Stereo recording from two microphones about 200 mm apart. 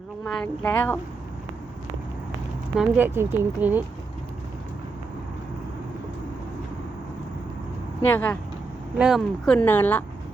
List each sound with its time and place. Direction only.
0.3 s speech: 5° left (ahead or behind)
2.7 s speech: 10° right (ahead or behind)
8.0 s speech: 10° left (ahead or behind)
9.0 s speech: 5° right (ahead or behind)
9.5 s speech: 10° left (ahead or behind)